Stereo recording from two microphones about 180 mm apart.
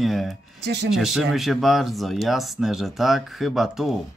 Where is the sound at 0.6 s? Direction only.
70° right (ahead or behind).